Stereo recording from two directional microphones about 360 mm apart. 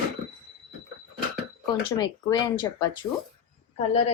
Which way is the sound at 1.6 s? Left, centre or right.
Centre.